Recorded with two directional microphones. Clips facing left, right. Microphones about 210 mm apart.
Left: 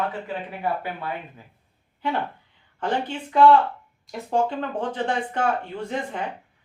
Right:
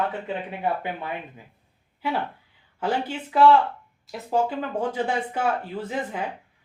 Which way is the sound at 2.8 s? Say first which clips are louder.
Even; 5° right (ahead or behind).